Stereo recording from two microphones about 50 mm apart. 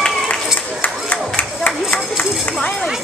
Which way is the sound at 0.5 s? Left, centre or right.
Left.